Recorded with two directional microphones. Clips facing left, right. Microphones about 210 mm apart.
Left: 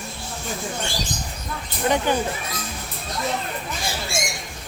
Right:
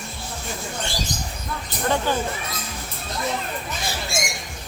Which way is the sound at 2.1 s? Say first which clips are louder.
Left 2 dB; 15° left (ahead or behind).